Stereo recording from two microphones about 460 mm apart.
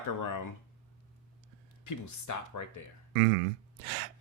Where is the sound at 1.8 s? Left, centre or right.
Left.